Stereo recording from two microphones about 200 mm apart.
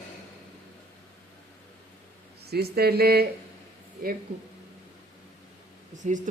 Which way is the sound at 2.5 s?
50° right (ahead or behind).